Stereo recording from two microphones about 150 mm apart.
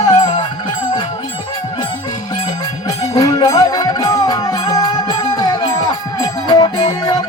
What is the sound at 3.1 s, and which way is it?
Music, 25° left (ahead or behind).